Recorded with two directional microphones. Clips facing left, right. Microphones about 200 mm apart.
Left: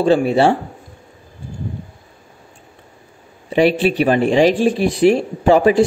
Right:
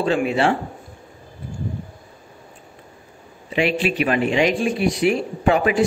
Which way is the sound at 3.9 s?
30° left (ahead or behind).